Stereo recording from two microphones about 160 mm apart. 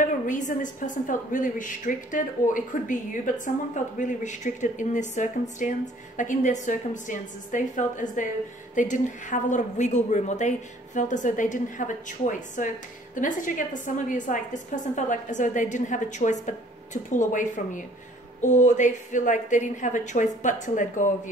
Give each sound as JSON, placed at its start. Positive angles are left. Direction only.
{"t": 0.0, "sound": "a woman's voice", "side_deg": 50}